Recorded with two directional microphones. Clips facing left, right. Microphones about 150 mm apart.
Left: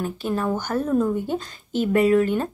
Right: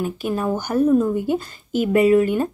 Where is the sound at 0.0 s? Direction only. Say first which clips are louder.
Right 2 dB; 15° right (ahead or behind).